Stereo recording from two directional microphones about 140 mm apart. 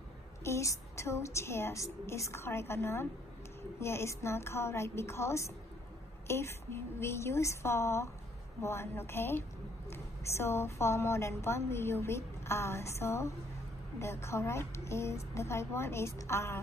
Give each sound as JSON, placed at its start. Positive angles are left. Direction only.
{"t": 0.4, "sound": "a woman's voice", "side_deg": 20}